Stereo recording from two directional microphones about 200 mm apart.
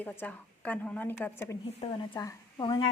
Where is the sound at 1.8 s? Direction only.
30° left (ahead or behind).